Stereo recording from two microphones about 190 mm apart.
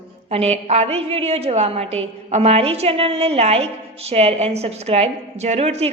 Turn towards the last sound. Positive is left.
turn(degrees=-35)  # may be behind; listen again after turning